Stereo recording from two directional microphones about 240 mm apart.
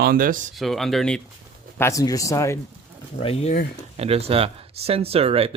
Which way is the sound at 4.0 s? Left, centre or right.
Right.